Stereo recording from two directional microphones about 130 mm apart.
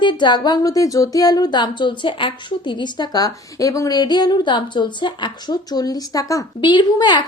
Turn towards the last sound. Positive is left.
turn(degrees=35)  # may be behind; listen again after turning